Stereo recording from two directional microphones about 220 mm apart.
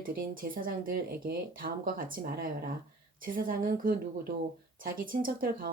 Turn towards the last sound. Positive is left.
turn(degrees=-40)  # may be behind; listen again after turning